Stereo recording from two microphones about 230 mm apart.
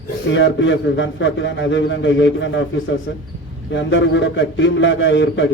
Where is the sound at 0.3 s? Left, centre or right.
Left.